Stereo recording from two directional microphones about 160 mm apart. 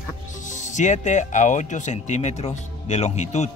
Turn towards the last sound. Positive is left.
turn(degrees=45)  # may be behind; listen again after turning